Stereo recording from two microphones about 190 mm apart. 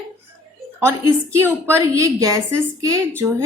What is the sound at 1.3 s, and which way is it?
A woman's voice, 15° right (ahead or behind).